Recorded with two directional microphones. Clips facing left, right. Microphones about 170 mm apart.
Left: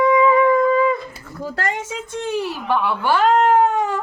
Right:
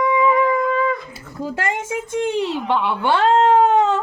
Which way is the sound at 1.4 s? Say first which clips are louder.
Right 1 dB; 15° right (ahead or behind).